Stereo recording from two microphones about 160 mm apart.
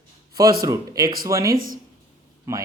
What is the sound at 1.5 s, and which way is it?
Speech, 60° right (ahead or behind).